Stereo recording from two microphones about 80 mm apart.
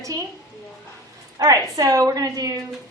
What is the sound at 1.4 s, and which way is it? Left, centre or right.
A woman's voice, right.